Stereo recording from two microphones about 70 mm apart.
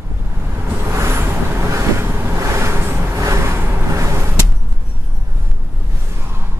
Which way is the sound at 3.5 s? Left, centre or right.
Right.